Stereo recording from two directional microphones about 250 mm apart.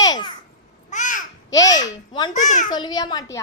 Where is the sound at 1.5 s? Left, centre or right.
Centre.